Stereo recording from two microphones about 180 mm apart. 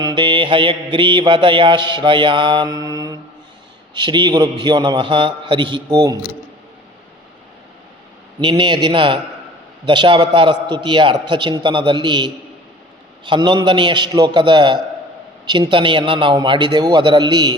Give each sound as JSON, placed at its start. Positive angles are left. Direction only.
{"t": 0.0, "sound": "mantra", "side_deg": -25}
{"t": 8.4, "sound": "mantra", "side_deg": -25}